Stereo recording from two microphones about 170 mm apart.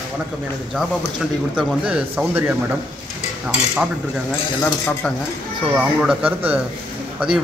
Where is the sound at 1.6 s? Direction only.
5° right (ahead or behind).